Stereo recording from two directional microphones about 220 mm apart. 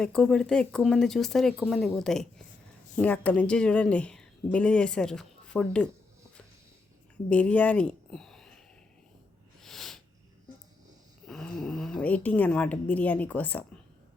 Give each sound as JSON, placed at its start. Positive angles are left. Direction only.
{"t": 0.0, "sound": "a woman's voice", "side_deg": 5}
{"t": 7.3, "sound": "a woman's voice", "side_deg": 5}
{"t": 9.6, "sound": "a sound", "side_deg": 0}
{"t": 11.3, "sound": "speech", "side_deg": 0}